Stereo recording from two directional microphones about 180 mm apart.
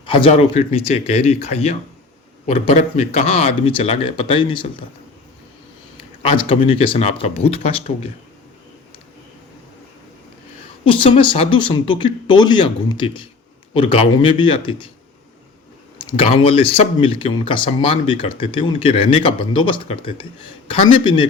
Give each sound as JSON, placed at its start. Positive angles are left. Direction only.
{"t": 0.0, "sound": "speech", "side_deg": 30}
{"t": 6.2, "sound": "speech", "side_deg": 30}
{"t": 10.9, "sound": "speech", "side_deg": 30}
{"t": 16.0, "sound": "speech", "side_deg": 30}